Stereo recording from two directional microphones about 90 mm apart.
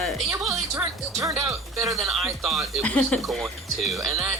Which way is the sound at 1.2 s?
35° right (ahead or behind).